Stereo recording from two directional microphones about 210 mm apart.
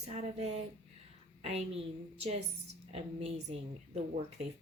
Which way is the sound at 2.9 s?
30° right (ahead or behind).